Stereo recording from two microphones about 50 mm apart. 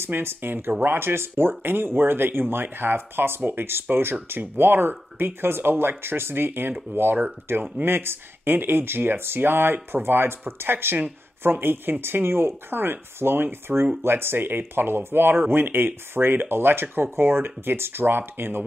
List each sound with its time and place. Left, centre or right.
0.0 s speech: right
7.5 s speech: right